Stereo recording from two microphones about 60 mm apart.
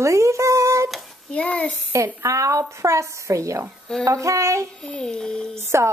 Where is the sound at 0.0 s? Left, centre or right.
Right.